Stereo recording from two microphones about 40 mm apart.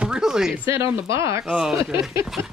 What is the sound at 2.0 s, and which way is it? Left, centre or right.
Speech, centre.